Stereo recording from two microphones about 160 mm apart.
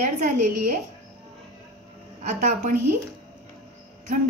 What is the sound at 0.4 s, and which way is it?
Speech, 55° right (ahead or behind).